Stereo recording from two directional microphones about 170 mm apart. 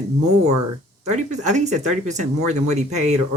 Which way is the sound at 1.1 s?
45° right (ahead or behind).